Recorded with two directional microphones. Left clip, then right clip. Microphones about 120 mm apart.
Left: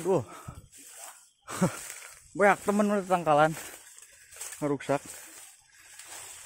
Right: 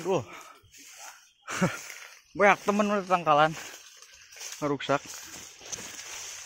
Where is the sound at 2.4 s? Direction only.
30° left (ahead or behind).